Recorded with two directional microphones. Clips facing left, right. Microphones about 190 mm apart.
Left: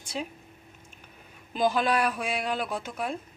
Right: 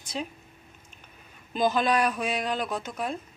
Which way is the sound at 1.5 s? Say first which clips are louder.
Right 1 dB; 10° left (ahead or behind).